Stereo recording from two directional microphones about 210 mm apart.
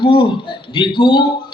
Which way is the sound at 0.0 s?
25° left (ahead or behind).